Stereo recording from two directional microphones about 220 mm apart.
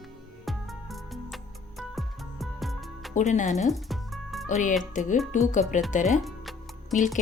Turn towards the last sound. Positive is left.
turn(degrees=35)  # may be behind; listen again after turning